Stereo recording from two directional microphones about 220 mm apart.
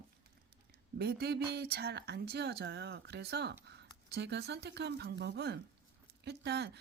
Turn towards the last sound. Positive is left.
turn(degrees=-50)  # may be behind; listen again after turning